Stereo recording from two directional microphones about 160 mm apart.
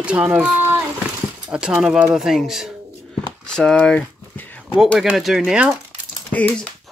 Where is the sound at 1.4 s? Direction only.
5° right (ahead or behind).